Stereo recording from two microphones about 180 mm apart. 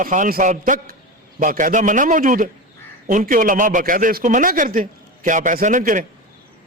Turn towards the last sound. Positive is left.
turn(degrees=-45)  # may be behind; listen again after turning